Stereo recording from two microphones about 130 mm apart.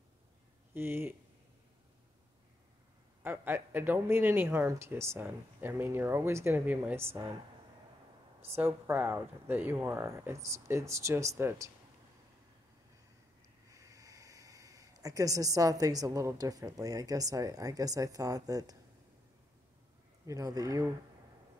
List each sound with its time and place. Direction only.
0.7 s speech: 20° right (ahead or behind)
3.3 s speech: 15° right (ahead or behind)
8.5 s speech: 15° right (ahead or behind)
13.7 s speech: 25° right (ahead or behind)
20.2 s speech: 25° right (ahead or behind)